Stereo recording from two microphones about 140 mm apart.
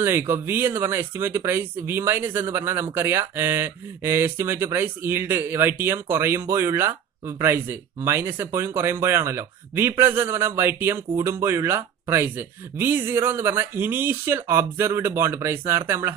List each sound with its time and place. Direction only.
0.0 s speech: 15° right (ahead or behind)